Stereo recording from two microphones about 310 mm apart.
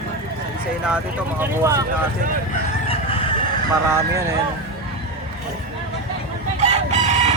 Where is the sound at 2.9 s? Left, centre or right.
Centre.